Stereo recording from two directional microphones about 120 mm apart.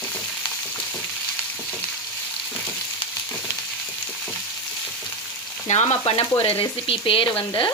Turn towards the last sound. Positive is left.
turn(degrees=45)  # may be behind; listen again after turning